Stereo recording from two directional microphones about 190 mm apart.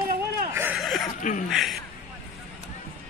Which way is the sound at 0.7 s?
Centre (ahead or behind).